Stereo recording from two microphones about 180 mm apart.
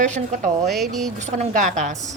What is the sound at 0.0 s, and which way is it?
Speech, 45° right (ahead or behind).